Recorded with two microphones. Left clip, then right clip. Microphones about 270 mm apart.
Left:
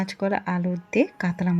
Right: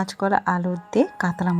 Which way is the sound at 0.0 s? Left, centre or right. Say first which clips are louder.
Right 5 dB; centre.